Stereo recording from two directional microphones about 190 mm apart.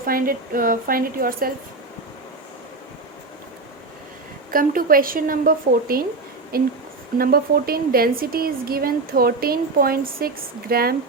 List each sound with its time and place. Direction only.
0.0 s speech: 50° right (ahead or behind)
4.5 s speech: 50° right (ahead or behind)